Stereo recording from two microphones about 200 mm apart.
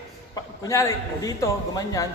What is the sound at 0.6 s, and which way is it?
A man's voice, 15° left (ahead or behind).